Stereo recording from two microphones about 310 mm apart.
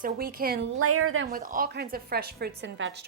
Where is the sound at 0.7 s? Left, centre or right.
Right.